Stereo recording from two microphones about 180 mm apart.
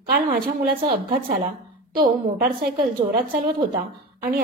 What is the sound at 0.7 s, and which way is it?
Speech, 55° right (ahead or behind).